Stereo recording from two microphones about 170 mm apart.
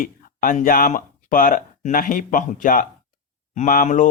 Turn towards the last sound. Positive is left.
turn(degrees=50)  # may be behind; listen again after turning